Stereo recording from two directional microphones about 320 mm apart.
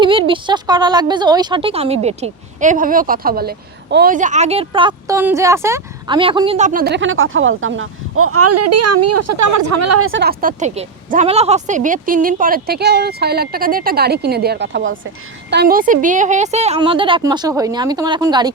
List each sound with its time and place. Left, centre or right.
0.0 s speech: centre; by 10.1 s right
10.1 s a woman's voice: right; by 18.5 s centre